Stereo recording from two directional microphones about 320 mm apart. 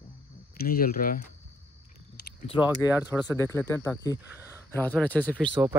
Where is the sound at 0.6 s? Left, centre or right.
Left.